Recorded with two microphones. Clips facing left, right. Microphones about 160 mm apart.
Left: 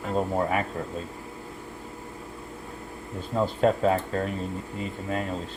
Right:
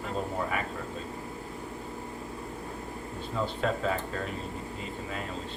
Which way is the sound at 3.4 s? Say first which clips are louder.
Left 8 dB; 45° left (ahead or behind).